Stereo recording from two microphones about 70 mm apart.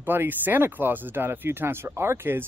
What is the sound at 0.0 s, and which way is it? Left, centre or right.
Speech, right.